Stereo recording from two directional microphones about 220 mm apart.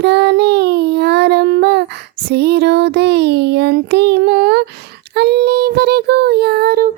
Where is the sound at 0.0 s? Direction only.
50° right (ahead or behind).